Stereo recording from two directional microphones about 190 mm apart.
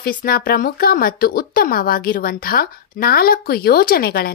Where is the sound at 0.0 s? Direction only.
50° left (ahead or behind).